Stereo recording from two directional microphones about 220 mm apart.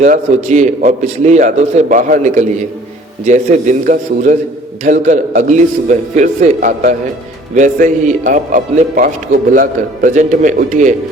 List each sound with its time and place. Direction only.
0.0 s a man's voice: 30° right (ahead or behind)